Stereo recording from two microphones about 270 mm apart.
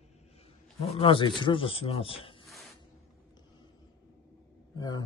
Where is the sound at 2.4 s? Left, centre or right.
Centre.